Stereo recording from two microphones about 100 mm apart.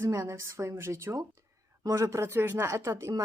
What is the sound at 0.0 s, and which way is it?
Speech, 30° right (ahead or behind).